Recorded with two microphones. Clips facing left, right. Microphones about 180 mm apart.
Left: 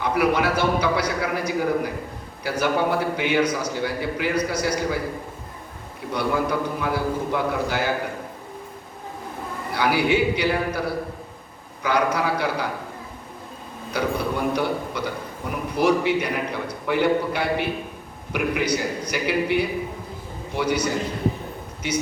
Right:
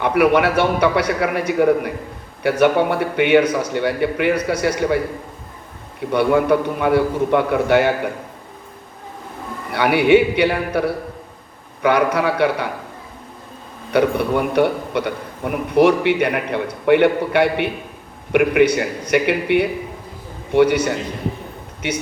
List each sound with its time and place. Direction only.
0.0 s a man's voice: 60° right (ahead or behind)
6.1 s a man's voice: 60° right (ahead or behind)
9.7 s a man's voice: 60° right (ahead or behind)
13.9 s a man's voice: 60° right (ahead or behind)